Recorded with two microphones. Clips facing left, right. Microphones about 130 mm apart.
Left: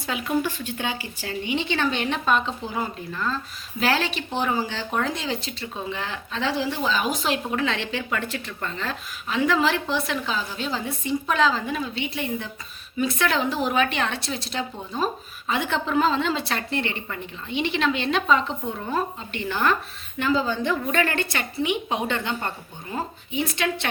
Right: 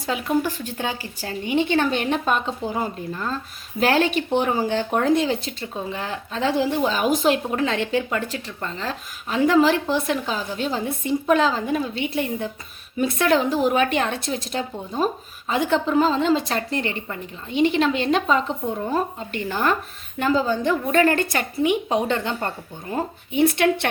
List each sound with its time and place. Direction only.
0.0 s a woman's voice: 35° right (ahead or behind)
22.9 s speech: 55° right (ahead or behind)